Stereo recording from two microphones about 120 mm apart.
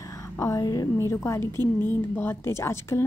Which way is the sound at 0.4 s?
30° left (ahead or behind).